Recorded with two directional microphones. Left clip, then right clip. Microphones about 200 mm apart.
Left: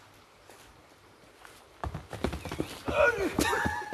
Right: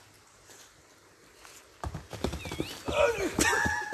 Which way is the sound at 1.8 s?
Centre (ahead or behind).